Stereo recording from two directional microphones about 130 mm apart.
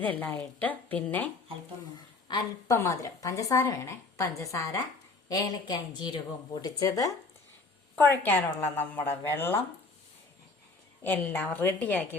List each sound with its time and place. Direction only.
0.0 s a woman's voice: 10° left (ahead or behind)
2.3 s speech: 35° left (ahead or behind)
2.6 s a woman's voice: 20° left (ahead or behind)
7.9 s a woman's voice: 15° left (ahead or behind)
11.0 s a woman's voice: 15° left (ahead or behind)